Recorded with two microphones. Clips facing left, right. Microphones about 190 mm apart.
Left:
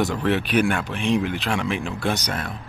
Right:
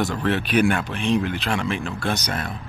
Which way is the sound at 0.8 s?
15° left (ahead or behind).